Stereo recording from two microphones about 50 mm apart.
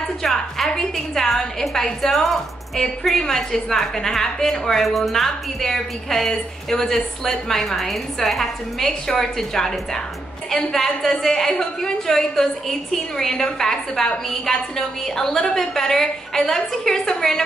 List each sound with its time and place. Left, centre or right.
0.2 s a woman's voice: centre